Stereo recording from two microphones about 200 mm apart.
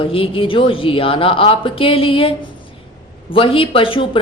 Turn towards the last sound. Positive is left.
turn(degrees=25)  # may be behind; listen again after turning